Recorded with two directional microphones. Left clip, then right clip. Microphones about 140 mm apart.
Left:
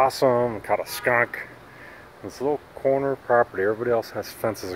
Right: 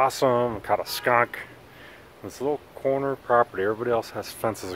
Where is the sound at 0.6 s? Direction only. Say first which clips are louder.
Even; 20° right (ahead or behind).